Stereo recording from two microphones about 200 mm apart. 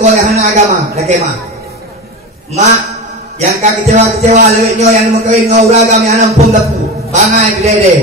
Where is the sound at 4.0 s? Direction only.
35° right (ahead or behind).